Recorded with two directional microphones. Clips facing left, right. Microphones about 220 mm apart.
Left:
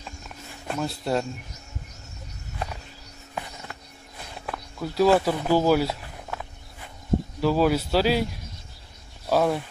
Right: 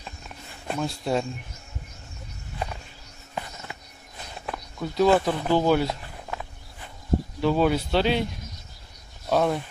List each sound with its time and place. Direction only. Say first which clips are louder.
0.7 s speech: even; centre (ahead or behind)
4.5 s speech: even; 5° left (ahead or behind)
9.3 s speech: left 1 dB; 5° left (ahead or behind)